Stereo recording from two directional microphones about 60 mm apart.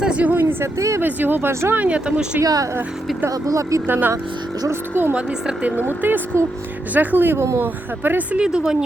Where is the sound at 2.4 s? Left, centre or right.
Right.